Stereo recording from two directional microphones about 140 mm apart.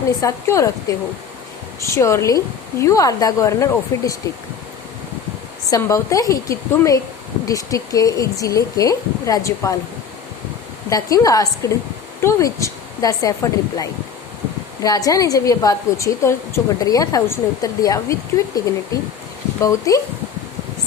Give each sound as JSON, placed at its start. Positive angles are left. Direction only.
{"t": 0.2, "sound": "a woman's voice", "side_deg": 20}
{"t": 5.7, "sound": "a woman's voice", "side_deg": 25}
{"t": 10.8, "sound": "a woman's voice", "side_deg": 25}
{"t": 14.8, "sound": "a woman's voice", "side_deg": 25}
{"t": 19.6, "sound": "a woman's voice", "side_deg": 25}